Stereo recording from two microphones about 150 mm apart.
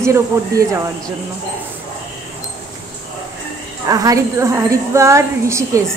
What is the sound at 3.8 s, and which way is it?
A woman's voice, 25° right (ahead or behind).